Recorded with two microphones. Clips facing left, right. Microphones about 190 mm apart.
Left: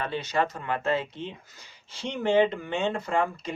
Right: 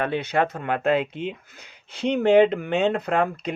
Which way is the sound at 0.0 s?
60° right (ahead or behind).